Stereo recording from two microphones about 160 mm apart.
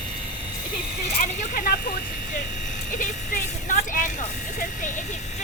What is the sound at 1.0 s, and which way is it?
Speech, 50° left (ahead or behind).